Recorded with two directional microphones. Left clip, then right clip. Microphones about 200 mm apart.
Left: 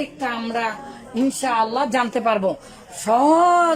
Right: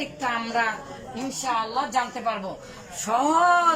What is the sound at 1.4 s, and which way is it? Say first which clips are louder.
Speech: left 4 dB; 45° left (ahead or behind).